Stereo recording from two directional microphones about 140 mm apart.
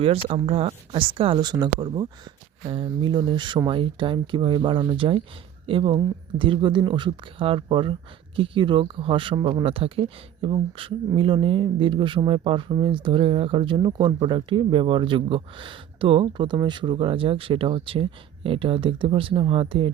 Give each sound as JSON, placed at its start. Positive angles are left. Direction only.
{"t": 0.0, "sound": "speech", "side_deg": -45}